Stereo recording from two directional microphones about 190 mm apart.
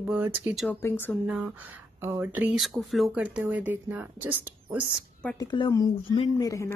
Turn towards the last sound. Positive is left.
turn(degrees=20)  # may be behind; listen again after turning